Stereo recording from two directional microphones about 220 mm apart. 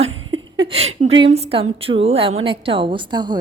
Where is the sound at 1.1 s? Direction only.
25° right (ahead or behind).